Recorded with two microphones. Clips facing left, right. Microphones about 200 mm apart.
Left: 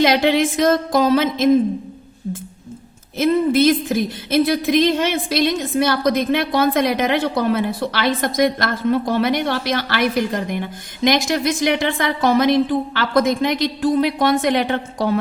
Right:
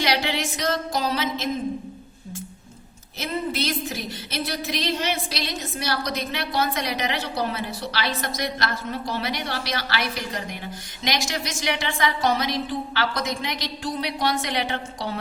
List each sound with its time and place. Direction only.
0.0 s a woman's voice: 50° left (ahead or behind)
3.2 s a woman's voice: 50° left (ahead or behind)